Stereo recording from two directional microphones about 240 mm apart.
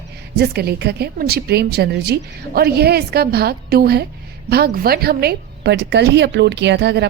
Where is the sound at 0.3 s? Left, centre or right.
Right.